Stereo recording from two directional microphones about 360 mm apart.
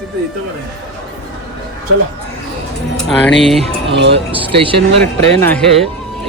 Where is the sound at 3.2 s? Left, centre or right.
Centre.